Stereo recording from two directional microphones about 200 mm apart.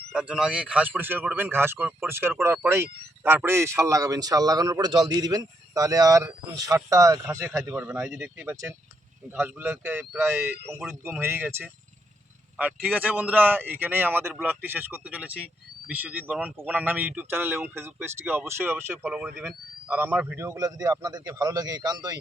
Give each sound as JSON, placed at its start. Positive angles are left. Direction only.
{"t": 0.1, "sound": "a man's voice", "side_deg": -5}